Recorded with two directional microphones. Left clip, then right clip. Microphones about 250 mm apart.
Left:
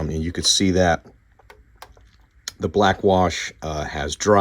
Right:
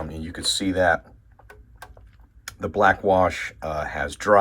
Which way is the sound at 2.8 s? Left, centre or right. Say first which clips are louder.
Right 1 dB; left.